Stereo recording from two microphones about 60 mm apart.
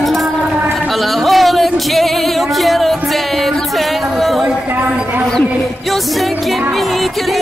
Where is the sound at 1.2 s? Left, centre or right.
Centre.